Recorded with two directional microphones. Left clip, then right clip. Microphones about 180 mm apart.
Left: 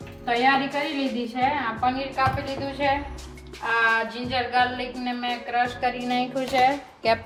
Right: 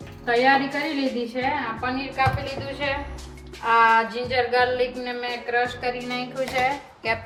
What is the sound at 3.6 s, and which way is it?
Speech, centre (ahead or behind).